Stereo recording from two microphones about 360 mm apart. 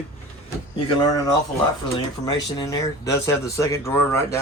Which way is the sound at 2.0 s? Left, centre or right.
Centre.